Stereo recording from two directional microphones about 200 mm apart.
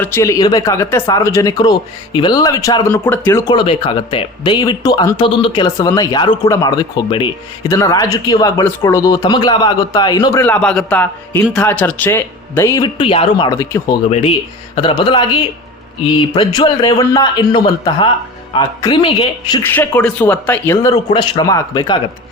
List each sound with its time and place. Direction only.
0.0 s a man's voice: 15° left (ahead or behind)
10.4 s a man's voice: 5° left (ahead or behind)
13.0 s speech: 30° left (ahead or behind)
14.1 s speech: 30° left (ahead or behind)
16.3 s speech: 20° left (ahead or behind)
19.6 s a man's voice: 10° left (ahead or behind)